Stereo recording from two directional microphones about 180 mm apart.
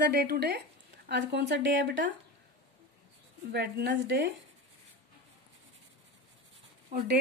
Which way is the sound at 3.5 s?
65° right (ahead or behind).